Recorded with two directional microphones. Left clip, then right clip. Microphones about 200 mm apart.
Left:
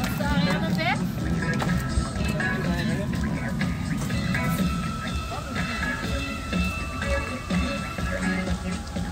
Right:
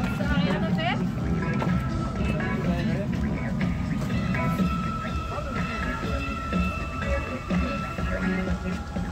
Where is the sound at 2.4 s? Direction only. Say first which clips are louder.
Left 5 dB; 15° left (ahead or behind).